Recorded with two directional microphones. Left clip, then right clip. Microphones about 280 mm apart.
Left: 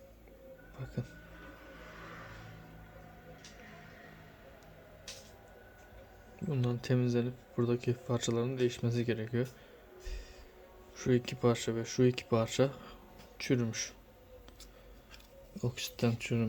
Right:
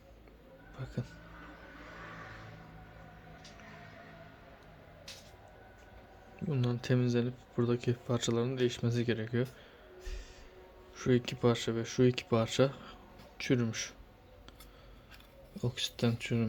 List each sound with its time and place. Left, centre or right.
1.0 s speech: centre
6.5 s speech: centre
10.9 s speech: centre
15.5 s speech: centre